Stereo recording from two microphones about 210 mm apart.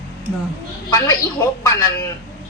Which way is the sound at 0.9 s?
15° left (ahead or behind).